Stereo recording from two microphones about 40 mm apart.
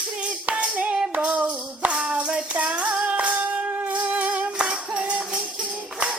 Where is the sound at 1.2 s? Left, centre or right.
Right.